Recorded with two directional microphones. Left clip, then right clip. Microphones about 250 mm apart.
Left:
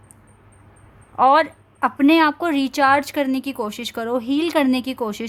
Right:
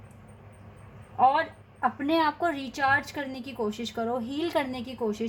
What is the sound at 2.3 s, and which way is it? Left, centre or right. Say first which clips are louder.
A woman's voice: left 7 dB; left.